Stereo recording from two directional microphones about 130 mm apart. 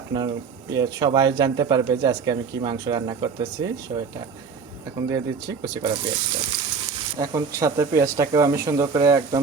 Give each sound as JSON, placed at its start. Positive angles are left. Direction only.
{"t": 0.1, "sound": "speech", "side_deg": -30}
{"t": 7.2, "sound": "speech", "side_deg": -25}